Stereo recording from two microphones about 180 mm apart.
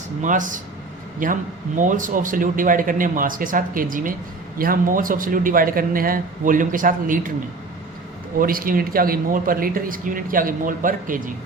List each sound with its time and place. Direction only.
0.2 s speech: 45° right (ahead or behind)
8.4 s speech: 50° right (ahead or behind)